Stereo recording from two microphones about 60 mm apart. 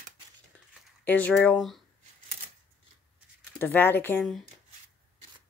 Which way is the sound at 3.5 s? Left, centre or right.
Left.